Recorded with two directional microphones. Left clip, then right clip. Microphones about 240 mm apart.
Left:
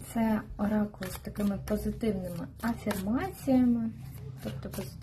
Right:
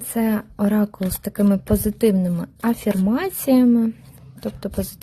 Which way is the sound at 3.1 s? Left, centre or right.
Right.